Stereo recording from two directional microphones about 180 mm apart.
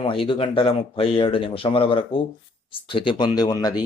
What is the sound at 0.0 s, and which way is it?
Speech, 30° left (ahead or behind).